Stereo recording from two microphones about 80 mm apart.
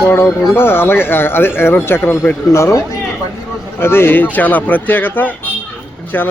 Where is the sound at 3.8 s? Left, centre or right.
Left.